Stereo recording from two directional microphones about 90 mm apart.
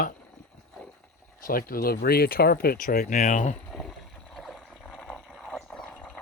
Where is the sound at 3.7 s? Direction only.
Centre (ahead or behind).